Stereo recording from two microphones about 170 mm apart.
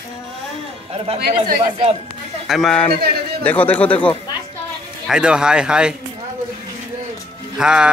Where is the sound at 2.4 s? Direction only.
Centre (ahead or behind).